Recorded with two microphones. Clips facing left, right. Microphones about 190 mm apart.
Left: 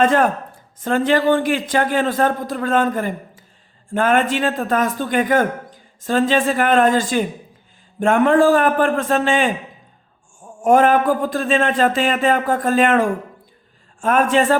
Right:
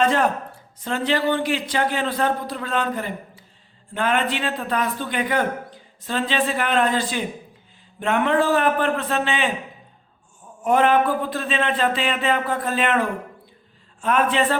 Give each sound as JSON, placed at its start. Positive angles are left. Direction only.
{"t": 0.0, "sound": "a man's voice", "side_deg": 50}